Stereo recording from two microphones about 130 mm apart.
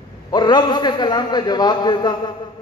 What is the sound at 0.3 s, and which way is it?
A man's voice, 35° left (ahead or behind).